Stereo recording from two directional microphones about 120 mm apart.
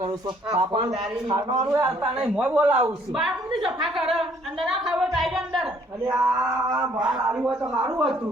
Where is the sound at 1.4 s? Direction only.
30° right (ahead or behind).